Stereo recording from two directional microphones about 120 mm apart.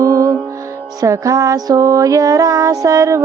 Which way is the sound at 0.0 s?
30° right (ahead or behind).